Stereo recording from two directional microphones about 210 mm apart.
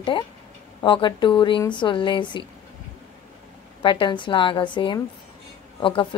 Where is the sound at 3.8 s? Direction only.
25° left (ahead or behind).